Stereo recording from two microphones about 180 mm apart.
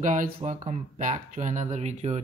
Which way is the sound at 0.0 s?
45° right (ahead or behind).